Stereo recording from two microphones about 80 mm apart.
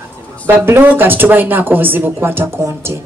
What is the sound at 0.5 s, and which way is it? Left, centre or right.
Speech, right.